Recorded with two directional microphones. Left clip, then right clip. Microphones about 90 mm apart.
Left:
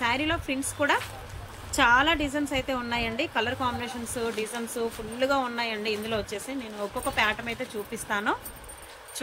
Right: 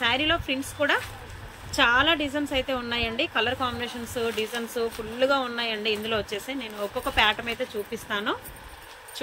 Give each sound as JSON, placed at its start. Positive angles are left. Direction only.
{"t": 0.0, "sound": "a woman's voice", "side_deg": 15}
{"t": 7.9, "sound": "a woman's voice", "side_deg": 30}